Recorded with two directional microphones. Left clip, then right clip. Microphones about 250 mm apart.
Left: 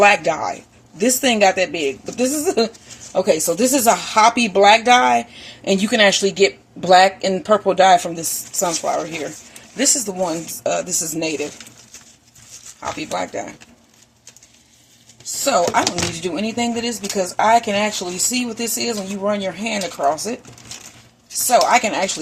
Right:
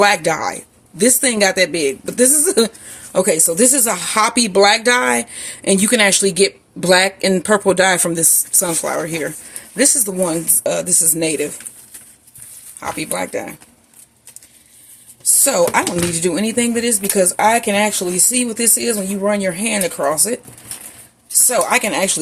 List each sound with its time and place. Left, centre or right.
0.0 s speech: right
10.6 s speech: right
12.8 s speech: right
15.4 s speech: right
21.4 s speech: right